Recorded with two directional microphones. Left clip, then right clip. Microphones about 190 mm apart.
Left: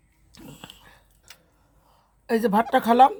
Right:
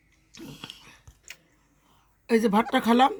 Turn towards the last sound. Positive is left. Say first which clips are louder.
# left 5 dB
turn(degrees=30)  # may be behind; listen again after turning